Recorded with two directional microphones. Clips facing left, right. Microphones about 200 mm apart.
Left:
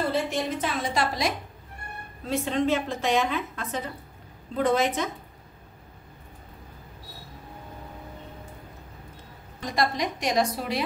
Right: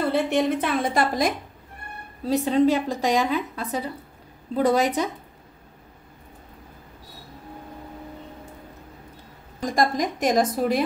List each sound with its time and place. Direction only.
0.1 s a woman's voice: 60° right (ahead or behind)
2.2 s a woman's voice: 40° right (ahead or behind)
9.7 s a woman's voice: 50° right (ahead or behind)